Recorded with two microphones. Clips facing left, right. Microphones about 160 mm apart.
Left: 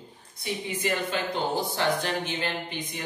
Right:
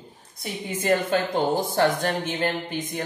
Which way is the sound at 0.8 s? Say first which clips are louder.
Right 8 dB; 45° right (ahead or behind).